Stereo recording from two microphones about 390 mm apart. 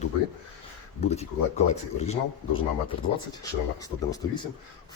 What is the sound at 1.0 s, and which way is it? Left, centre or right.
Speech, centre.